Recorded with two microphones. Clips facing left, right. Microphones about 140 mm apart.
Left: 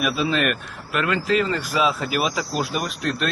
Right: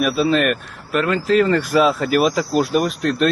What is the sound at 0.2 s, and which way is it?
Speech, 40° right (ahead or behind).